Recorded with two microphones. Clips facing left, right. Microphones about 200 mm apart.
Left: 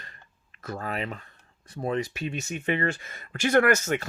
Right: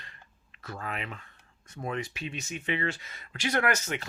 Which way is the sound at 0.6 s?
40° left (ahead or behind).